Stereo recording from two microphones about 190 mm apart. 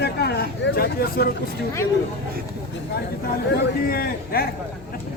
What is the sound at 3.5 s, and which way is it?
Speech, 50° left (ahead or behind).